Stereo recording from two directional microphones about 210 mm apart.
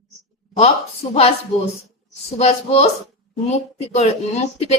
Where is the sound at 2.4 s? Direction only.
30° left (ahead or behind).